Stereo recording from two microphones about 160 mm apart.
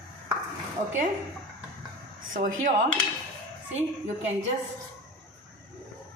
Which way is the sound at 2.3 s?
55° right (ahead or behind).